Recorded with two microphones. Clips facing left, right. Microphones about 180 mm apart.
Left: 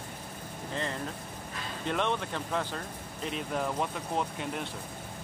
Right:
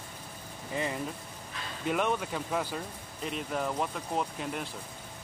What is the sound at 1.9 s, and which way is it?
Speech, 5° right (ahead or behind).